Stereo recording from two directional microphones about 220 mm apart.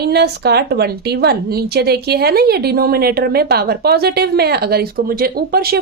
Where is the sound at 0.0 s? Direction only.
45° right (ahead or behind).